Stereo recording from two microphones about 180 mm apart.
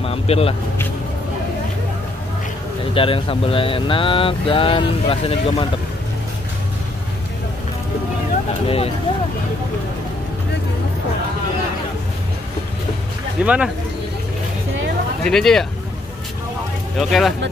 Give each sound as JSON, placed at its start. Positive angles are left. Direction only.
{"t": 0.0, "sound": "speech", "side_deg": 30}
{"t": 2.9, "sound": "speech", "side_deg": 30}
{"t": 8.6, "sound": "speech", "side_deg": 35}
{"t": 13.4, "sound": "speech", "side_deg": -5}
{"t": 15.2, "sound": "speech", "side_deg": 5}
{"t": 17.0, "sound": "speech", "side_deg": 0}